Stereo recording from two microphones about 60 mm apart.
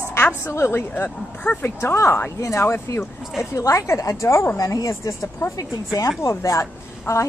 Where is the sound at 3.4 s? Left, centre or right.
Left.